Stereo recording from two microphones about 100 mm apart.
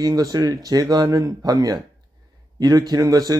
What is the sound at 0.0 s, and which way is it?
Speech, 40° right (ahead or behind).